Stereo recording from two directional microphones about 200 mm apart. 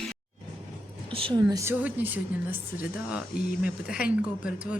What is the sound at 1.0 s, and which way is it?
Speech, 25° right (ahead or behind).